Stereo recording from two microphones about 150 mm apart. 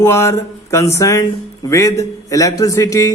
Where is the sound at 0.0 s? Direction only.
15° left (ahead or behind).